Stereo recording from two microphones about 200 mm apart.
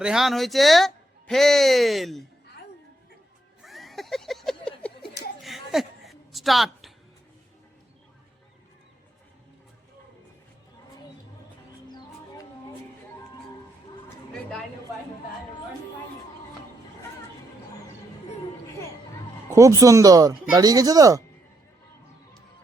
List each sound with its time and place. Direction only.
0.0 s speech: centre (ahead or behind)
3.6 s a sound: centre (ahead or behind)
11.9 s music: 20° left (ahead or behind)
19.5 s speech: 15° right (ahead or behind)